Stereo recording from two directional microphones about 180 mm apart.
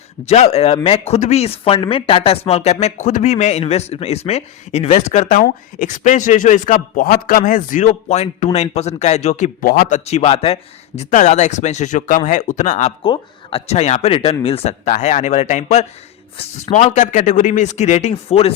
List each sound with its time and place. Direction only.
0.3 s speech: 35° left (ahead or behind); by 10.0 s 55° left (ahead or behind)
10.1 s speech: 35° left (ahead or behind)
13.0 s speech: 30° left (ahead or behind)